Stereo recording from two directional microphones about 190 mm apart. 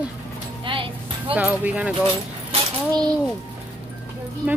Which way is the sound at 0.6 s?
25° right (ahead or behind).